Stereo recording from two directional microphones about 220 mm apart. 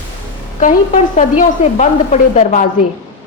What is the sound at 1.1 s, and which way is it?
Speech, 30° left (ahead or behind).